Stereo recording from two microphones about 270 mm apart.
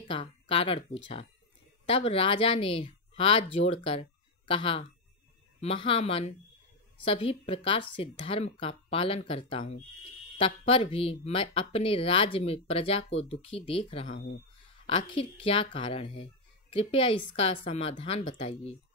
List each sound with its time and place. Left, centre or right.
0.0 s speech: centre